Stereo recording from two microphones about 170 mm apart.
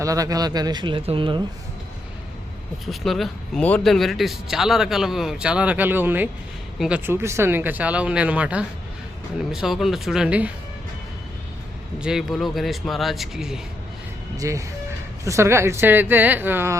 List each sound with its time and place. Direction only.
0.0 s speech: 20° right (ahead or behind)
2.8 s speech: centre (ahead or behind)
11.9 s speech: 5° right (ahead or behind)
14.3 s speech: 20° right (ahead or behind)